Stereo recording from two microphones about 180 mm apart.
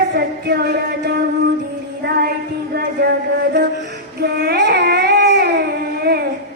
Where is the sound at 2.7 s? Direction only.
60° right (ahead or behind).